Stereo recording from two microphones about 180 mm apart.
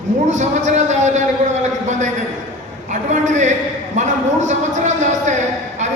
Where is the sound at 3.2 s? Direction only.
40° right (ahead or behind).